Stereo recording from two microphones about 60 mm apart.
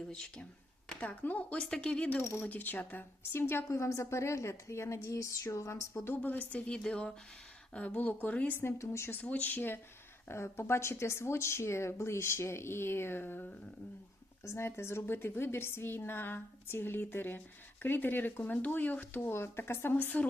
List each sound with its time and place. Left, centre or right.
0.1 s speech: centre
0.9 s speech: left
2.4 s speech: left
3.3 s a woman's voice: left
3.7 s speech: left
5.0 s a sound: left
6.1 s speech: left
8.5 s speech: left
9.2 s a woman's voice: left
14.4 s a woman's voice: left
19.3 s a woman's voice: left
19.9 s speech: left